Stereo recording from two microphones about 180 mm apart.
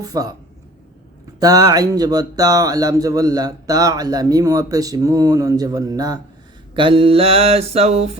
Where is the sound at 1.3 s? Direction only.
20° right (ahead or behind).